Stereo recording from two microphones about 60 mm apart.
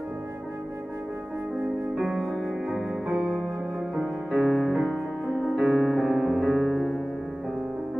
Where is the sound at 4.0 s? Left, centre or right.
Centre.